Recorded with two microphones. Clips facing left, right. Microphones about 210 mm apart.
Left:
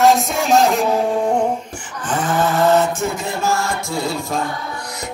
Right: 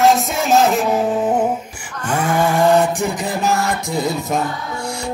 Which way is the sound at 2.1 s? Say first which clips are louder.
Right 1 dB; 10° right (ahead or behind).